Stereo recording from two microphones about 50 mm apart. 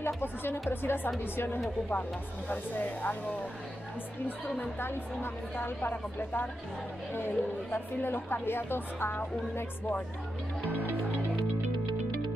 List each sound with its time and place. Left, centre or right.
0.0 s a woman's voice: left
1.9 s speech: left
4.7 s a woman's voice: left